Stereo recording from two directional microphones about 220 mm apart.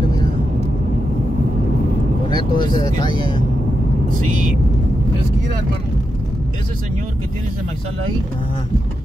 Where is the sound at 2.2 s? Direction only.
20° left (ahead or behind).